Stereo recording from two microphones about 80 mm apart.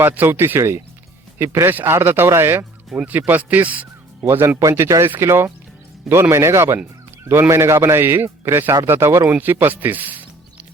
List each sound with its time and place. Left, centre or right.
0.0 s speech: right
4.3 s a man's voice: right